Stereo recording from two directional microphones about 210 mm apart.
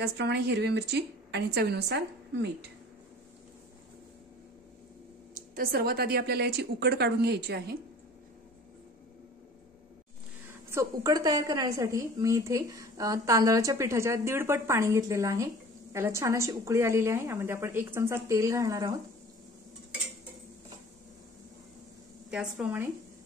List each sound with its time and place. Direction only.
0.0 s a woman's voice: 55° right (ahead or behind)
5.3 s a woman's voice: 45° right (ahead or behind)
10.7 s a woman's voice: 15° right (ahead or behind)
22.3 s speech: 5° right (ahead or behind)